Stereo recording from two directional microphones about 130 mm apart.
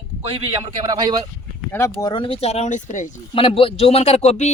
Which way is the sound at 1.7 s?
20° left (ahead or behind).